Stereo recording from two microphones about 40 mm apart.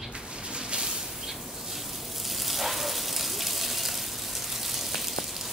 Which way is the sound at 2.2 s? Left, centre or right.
Centre.